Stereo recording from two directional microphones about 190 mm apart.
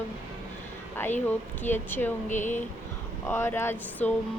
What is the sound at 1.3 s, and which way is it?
Speech, 10° left (ahead or behind).